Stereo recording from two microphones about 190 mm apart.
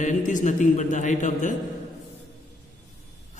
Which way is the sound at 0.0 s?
40° left (ahead or behind).